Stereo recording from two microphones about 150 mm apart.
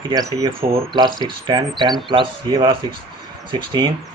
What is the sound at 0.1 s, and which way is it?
Speech, 25° right (ahead or behind).